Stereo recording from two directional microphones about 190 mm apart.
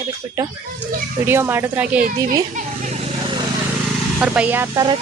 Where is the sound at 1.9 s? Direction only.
50° right (ahead or behind).